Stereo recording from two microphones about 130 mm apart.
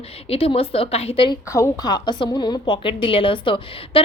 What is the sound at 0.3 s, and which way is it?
A woman's voice, 45° left (ahead or behind).